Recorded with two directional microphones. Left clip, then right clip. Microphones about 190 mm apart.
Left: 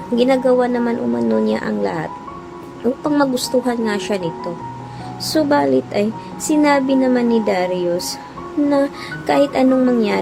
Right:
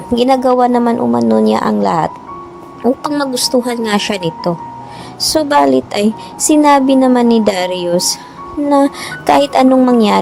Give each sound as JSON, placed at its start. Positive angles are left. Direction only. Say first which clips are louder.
{"t": 0.2, "sound": "speech", "louder": "right 4 dB", "side_deg": -30}
{"t": 5.3, "sound": "speech", "louder": "right 5 dB", "side_deg": -35}